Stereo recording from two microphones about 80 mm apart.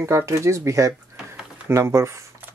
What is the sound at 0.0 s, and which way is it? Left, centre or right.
Speech, right.